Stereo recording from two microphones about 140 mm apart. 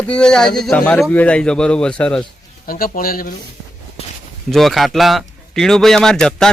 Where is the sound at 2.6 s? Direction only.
90° left.